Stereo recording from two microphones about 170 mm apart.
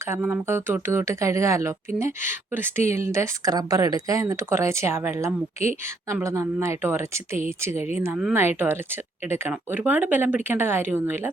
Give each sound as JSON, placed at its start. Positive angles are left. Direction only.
{"t": 0.0, "sound": "speech", "side_deg": -15}
{"t": 7.8, "sound": "speech", "side_deg": 40}
{"t": 8.0, "sound": "speech", "side_deg": -10}